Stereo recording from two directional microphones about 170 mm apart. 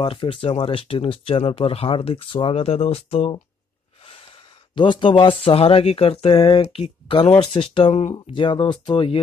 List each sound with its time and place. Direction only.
0.0 s speech: 30° left (ahead or behind)
4.7 s speech: 30° left (ahead or behind)